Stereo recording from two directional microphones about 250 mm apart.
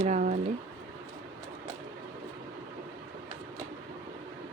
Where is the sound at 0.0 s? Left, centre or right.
Right.